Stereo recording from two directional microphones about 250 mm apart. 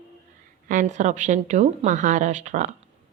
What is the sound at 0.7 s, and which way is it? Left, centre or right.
Speech, right.